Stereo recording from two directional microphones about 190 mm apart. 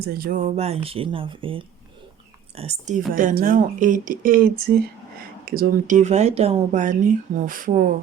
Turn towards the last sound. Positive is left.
turn(degrees=-45)  # may be behind; listen again after turning